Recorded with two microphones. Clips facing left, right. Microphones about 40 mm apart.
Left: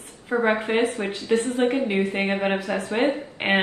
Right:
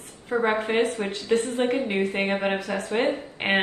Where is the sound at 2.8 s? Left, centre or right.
Left.